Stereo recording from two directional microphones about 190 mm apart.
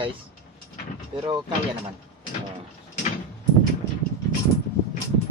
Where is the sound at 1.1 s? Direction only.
25° right (ahead or behind).